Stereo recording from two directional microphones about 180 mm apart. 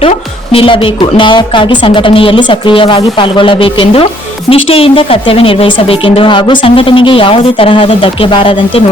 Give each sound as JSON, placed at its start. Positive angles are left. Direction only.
{"t": 0.5, "sound": "a woman's voice", "side_deg": 30}